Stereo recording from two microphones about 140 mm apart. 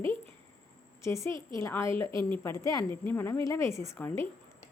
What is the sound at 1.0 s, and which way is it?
Speech, 20° left (ahead or behind).